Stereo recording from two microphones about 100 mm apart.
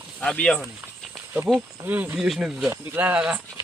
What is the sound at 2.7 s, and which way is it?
Speech, 20° right (ahead or behind).